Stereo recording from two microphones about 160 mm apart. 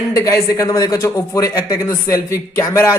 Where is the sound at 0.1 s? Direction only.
20° left (ahead or behind).